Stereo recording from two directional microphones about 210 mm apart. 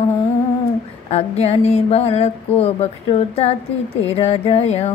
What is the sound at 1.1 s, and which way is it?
A woman's voice, 30° left (ahead or behind).